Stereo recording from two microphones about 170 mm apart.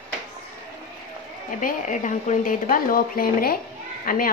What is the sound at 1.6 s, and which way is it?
A child's voice, 50° left (ahead or behind).